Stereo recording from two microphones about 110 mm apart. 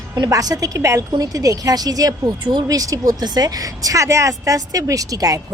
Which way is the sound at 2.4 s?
45° right (ahead or behind).